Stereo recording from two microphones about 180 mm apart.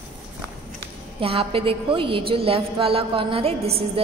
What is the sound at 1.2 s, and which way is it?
A woman's voice, 30° right (ahead or behind).